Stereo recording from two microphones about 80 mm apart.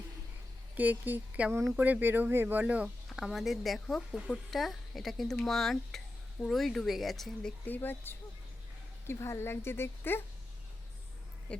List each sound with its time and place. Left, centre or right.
0.8 s speech: right
3.2 s speech: centre
7.6 s speech: left
9.1 s speech: left